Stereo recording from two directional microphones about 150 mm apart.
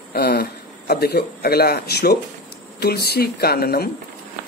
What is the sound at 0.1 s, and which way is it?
A man's voice, 90° left.